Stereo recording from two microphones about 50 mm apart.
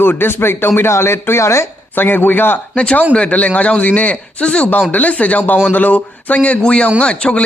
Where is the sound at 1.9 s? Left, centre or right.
Left.